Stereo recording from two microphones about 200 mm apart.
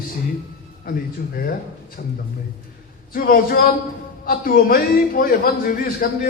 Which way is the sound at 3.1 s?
45° left (ahead or behind).